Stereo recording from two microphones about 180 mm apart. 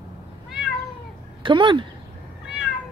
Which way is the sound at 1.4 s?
25° right (ahead or behind).